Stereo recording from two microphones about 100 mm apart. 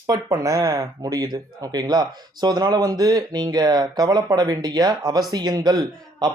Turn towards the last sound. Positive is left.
turn(degrees=-40)  # may be behind; listen again after turning